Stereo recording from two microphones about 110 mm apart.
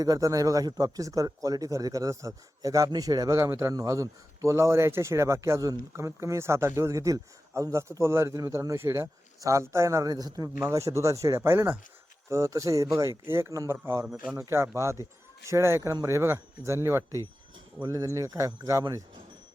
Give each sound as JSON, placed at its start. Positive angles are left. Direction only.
{"t": 0.0, "sound": "speech", "side_deg": -30}